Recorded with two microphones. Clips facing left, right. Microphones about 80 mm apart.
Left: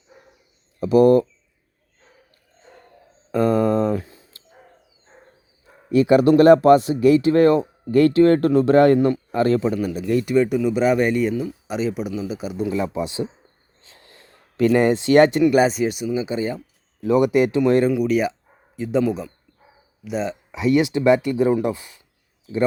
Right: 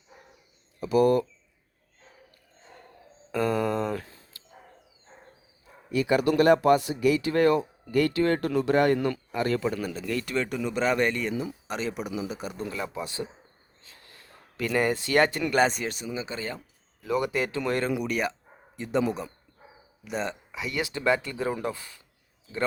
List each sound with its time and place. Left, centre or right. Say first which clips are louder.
0.8 s speech: left 8 dB; left
3.3 s a sound: left 8 dB; left
5.9 s a man's voice: left 9 dB; left
9.6 s a man's voice: left 7 dB; centre
12.7 s speech: left 9 dB; left
17.9 s a man's voice: left 8 dB; centre
20.5 s speech: left 13 dB; left